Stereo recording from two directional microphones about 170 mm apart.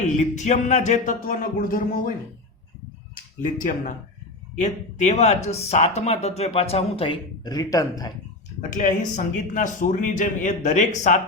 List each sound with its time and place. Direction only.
0.0 s speech: 45° left (ahead or behind)
3.6 s speech: 50° left (ahead or behind); by 8.1 s 20° left (ahead or behind)
8.7 s speech: 50° left (ahead or behind)